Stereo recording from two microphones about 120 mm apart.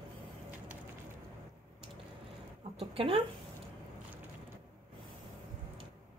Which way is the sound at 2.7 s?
50° right (ahead or behind).